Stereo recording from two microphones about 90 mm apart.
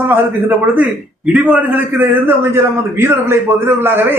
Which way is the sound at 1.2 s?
10° right (ahead or behind).